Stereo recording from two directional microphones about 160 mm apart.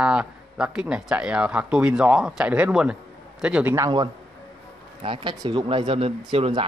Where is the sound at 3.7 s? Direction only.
25° right (ahead or behind).